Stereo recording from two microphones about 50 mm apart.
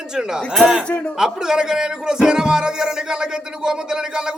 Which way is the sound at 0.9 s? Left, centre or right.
Left.